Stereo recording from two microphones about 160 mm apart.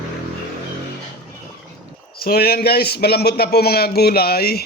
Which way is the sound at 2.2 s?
75° left (ahead or behind).